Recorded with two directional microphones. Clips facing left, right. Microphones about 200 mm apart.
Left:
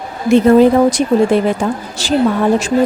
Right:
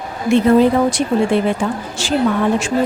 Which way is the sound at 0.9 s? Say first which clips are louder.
Left 4 dB; 40° left (ahead or behind).